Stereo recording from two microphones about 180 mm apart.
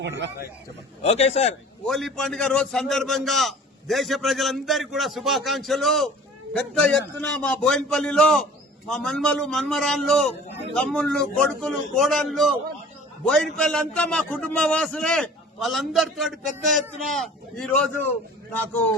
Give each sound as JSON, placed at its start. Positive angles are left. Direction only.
{"t": 0.0, "sound": "a man's voice", "side_deg": -75}
{"t": 1.0, "sound": "a man's voice", "side_deg": 35}
{"t": 1.9, "sound": "a man's voice", "side_deg": 0}